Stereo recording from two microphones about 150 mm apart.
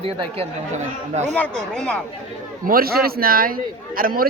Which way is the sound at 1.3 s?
5° left (ahead or behind).